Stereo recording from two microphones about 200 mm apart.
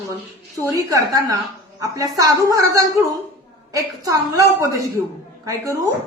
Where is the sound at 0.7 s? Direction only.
15° right (ahead or behind).